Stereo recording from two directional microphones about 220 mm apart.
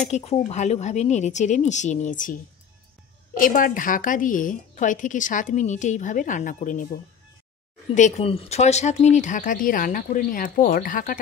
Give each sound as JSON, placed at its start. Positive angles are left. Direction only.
{"t": 0.1, "sound": "a woman's voice", "side_deg": 30}
{"t": 3.3, "sound": "a woman's voice", "side_deg": 40}